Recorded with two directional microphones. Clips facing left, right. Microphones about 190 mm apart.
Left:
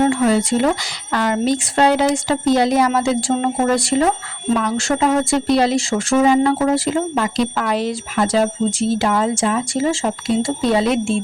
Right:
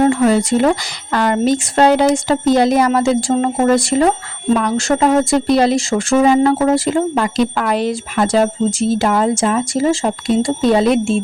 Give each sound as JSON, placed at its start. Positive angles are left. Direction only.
{"t": 0.0, "sound": "speech", "side_deg": -45}